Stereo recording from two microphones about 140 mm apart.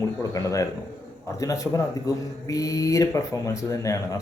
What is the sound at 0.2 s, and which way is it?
A man's voice, 25° left (ahead or behind).